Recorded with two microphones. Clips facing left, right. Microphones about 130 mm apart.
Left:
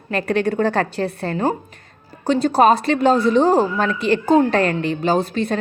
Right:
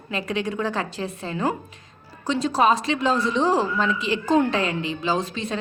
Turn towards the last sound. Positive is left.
turn(degrees=55)  # may be behind; listen again after turning